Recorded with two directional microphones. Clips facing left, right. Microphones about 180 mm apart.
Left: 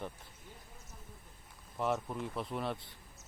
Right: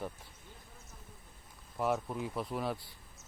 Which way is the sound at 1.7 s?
5° right (ahead or behind).